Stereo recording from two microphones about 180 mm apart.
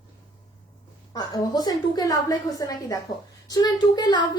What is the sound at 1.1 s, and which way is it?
A woman's voice, 20° left (ahead or behind).